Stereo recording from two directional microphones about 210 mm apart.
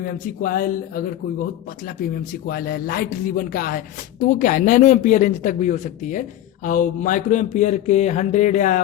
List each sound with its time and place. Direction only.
0.0 s speech: 45° left (ahead or behind)
2.3 s speech: 45° left (ahead or behind)